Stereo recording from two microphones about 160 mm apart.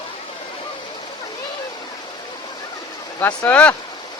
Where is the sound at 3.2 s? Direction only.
10° left (ahead or behind).